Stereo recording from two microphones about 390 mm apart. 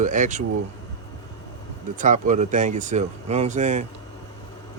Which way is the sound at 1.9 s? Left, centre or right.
Centre.